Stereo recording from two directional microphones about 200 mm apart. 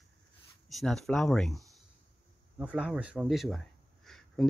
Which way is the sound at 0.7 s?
Centre (ahead or behind).